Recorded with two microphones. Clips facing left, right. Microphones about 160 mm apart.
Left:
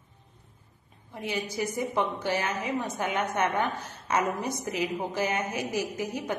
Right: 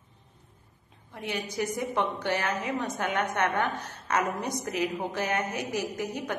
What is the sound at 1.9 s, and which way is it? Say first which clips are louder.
Speech: even; 5° left (ahead or behind).